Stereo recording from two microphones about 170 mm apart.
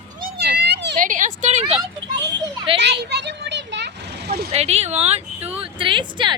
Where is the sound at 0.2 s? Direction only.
70° right (ahead or behind); by 0.9 s 85° right.